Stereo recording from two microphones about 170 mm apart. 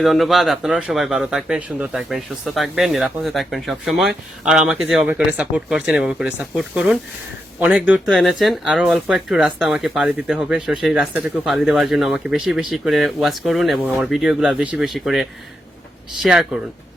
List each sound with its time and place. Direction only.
0.0 s speech: centre (ahead or behind)